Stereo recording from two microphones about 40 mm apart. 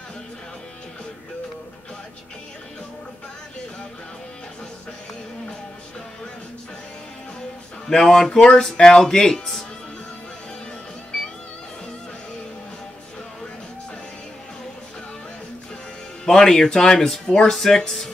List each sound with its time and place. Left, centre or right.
8.0 s speech: centre
16.3 s speech: centre